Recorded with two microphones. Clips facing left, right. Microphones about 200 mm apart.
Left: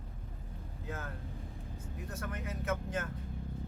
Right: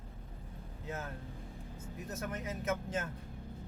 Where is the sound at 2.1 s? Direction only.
20° right (ahead or behind).